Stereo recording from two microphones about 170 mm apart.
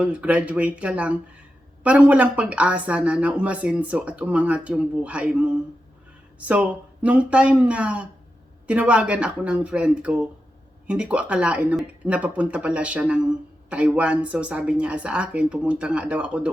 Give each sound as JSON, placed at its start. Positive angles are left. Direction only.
{"t": 0.0, "sound": "speech", "side_deg": -5}